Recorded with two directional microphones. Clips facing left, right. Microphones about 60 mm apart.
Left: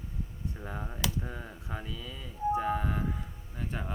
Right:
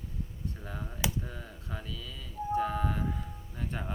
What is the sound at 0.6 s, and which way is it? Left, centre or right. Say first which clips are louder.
Speech: left 1 dB; centre.